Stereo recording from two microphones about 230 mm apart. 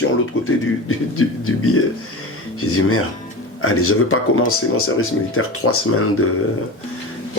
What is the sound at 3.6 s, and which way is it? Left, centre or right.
Speech, left.